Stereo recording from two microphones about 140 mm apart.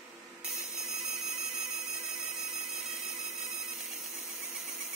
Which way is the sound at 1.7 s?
50° left (ahead or behind).